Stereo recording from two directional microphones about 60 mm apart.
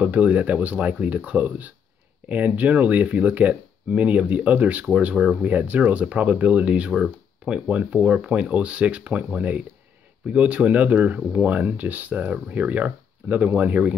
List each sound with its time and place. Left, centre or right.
0.0 s speech: right